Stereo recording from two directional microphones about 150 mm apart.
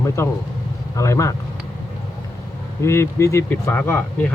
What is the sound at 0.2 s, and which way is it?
Speech, 20° left (ahead or behind).